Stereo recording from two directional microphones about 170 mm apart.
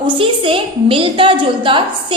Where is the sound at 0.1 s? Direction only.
30° right (ahead or behind).